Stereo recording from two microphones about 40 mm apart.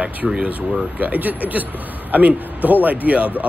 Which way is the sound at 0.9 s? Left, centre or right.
Right.